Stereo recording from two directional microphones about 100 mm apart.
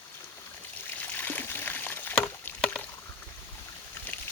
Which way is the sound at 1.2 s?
20° left (ahead or behind).